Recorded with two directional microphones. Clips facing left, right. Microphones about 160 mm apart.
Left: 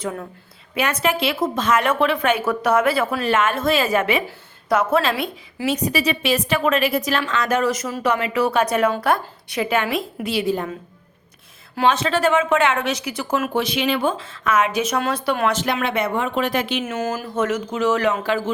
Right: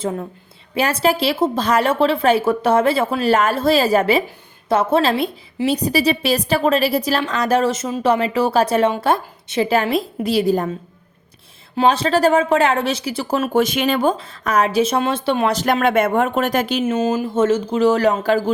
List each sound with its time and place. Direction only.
0.0 s a woman's voice: 25° right (ahead or behind)
11.8 s a woman's voice: 35° right (ahead or behind)
13.5 s a woman's voice: 45° right (ahead or behind); by 15.6 s 30° right (ahead or behind)
15.6 s speech: 50° right (ahead or behind)
16.8 s a woman's voice: 25° right (ahead or behind); by 18.5 s 40° right (ahead or behind)